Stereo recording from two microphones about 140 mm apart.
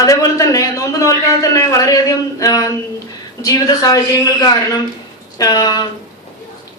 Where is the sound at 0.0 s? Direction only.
25° left (ahead or behind).